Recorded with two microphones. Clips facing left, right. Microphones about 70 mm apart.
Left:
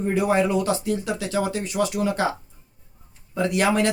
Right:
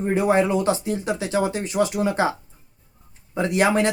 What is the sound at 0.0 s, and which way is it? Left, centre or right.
Speech, right.